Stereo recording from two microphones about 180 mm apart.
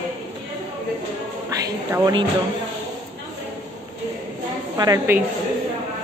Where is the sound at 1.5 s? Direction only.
20° right (ahead or behind).